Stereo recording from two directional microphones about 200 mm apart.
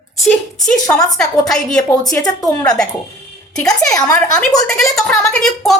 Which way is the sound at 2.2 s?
15° left (ahead or behind).